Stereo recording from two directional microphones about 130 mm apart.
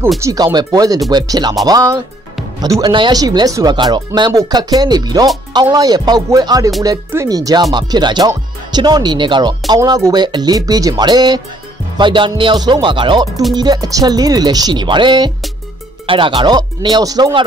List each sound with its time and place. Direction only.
0.2 s speech: 30° right (ahead or behind)